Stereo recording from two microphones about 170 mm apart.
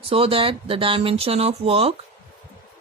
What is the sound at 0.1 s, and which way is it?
Speech, 35° right (ahead or behind).